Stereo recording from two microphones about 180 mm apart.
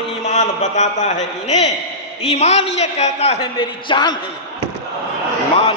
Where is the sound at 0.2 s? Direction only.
40° left (ahead or behind); by 4.2 s 25° left (ahead or behind).